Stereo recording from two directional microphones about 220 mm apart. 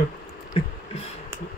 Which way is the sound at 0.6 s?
25° left (ahead or behind).